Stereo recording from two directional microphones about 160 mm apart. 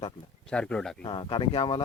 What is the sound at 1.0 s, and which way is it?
Speech, 30° left (ahead or behind).